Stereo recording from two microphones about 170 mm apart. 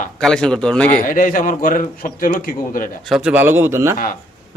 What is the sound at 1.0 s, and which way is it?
Speech, 50° left (ahead or behind).